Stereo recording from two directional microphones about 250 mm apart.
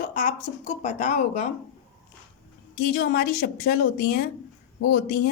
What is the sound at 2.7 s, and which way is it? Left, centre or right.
A woman's voice, left.